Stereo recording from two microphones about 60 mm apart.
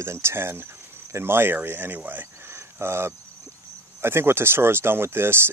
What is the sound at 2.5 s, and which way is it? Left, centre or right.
Cricket, right.